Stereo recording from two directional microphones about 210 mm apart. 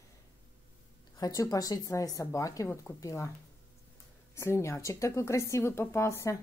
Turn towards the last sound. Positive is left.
turn(degrees=15)  # may be behind; listen again after turning